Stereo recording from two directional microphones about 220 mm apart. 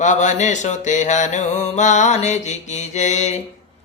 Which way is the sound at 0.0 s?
35° left (ahead or behind).